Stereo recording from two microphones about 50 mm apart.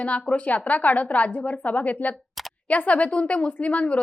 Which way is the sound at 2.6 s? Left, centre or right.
Left.